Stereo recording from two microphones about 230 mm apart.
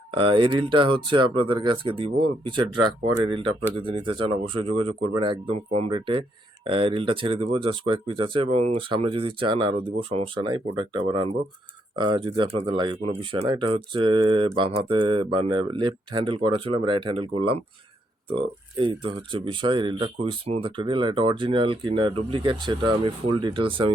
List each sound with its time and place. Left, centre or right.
0.1 s speech: right